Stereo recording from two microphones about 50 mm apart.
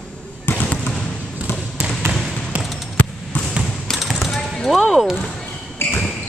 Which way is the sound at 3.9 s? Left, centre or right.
Centre.